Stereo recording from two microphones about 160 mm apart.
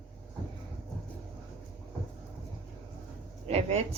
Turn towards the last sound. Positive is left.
turn(degrees=-40)  # may be behind; listen again after turning